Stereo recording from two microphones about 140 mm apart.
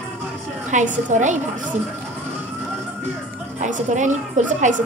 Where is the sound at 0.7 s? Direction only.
60° right (ahead or behind).